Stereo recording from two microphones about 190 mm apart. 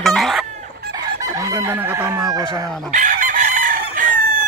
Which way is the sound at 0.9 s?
15° right (ahead or behind).